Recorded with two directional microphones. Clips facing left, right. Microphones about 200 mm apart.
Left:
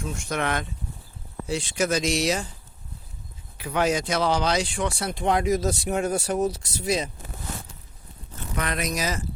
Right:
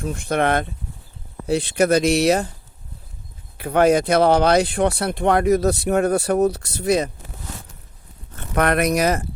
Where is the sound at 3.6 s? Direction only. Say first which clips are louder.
Right 8 dB; 55° right (ahead or behind).